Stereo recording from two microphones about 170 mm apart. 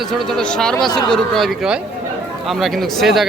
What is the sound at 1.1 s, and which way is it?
Speech, centre (ahead or behind).